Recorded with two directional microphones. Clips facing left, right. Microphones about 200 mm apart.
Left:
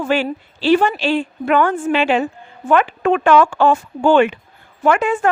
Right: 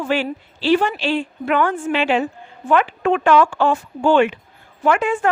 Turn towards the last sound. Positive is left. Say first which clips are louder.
# left 2 dB
turn(degrees=50)  # may be behind; listen again after turning